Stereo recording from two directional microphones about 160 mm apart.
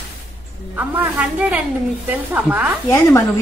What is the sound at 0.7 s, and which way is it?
Speech, 10° right (ahead or behind).